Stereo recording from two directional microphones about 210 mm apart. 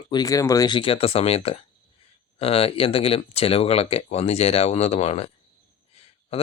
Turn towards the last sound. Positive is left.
turn(degrees=30)  # may be behind; listen again after turning